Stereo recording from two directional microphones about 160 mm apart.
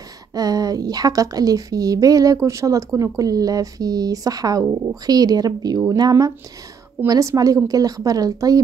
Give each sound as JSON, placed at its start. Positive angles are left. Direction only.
{"t": 0.3, "sound": "a woman's voice", "side_deg": -25}